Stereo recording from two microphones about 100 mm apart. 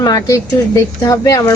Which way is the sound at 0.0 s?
35° left (ahead or behind).